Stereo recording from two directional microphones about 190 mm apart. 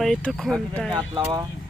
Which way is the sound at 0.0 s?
Centre (ahead or behind).